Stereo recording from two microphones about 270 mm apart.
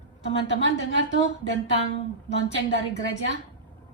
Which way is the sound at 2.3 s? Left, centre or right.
Right.